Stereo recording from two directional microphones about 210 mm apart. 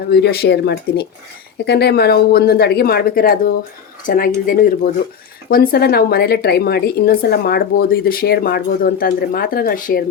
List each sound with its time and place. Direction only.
0.1 s a woman's voice: 50° left (ahead or behind)